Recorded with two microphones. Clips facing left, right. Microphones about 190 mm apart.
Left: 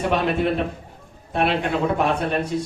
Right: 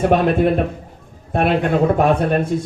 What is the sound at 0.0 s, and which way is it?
Speech, 50° right (ahead or behind).